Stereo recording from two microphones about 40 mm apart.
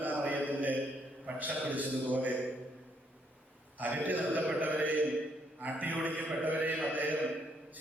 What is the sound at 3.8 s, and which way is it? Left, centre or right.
Mantra, right.